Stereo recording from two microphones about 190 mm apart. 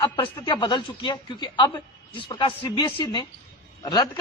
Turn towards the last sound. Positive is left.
turn(degrees=20)  # may be behind; listen again after turning